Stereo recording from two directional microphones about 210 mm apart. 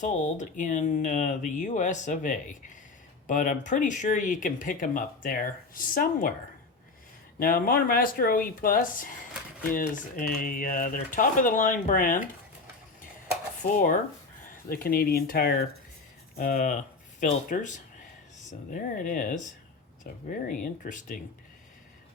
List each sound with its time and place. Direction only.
0.0 s speech: 35° left (ahead or behind)
7.3 s speech: 45° left (ahead or behind)
13.6 s speech: 40° left (ahead or behind)